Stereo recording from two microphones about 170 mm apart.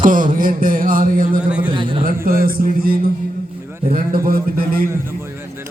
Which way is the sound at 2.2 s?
60° right (ahead or behind).